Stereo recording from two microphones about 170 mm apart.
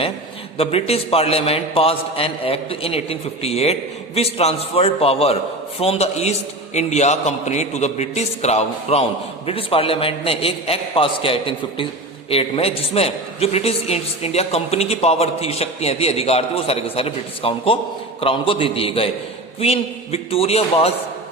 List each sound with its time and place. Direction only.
0.5 s a man's voice: 35° left (ahead or behind)